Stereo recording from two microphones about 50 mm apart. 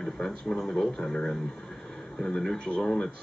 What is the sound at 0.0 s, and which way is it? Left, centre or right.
Speech, centre.